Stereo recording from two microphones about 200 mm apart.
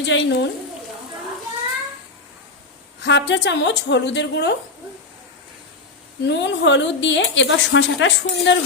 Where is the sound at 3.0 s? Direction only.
65° left (ahead or behind).